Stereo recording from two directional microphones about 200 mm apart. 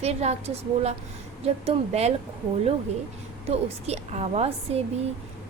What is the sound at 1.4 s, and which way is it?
Speech, 30° right (ahead or behind).